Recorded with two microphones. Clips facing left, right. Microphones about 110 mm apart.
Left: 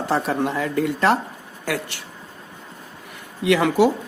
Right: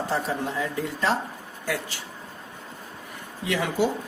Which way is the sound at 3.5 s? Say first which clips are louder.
Left 8 dB; 85° left.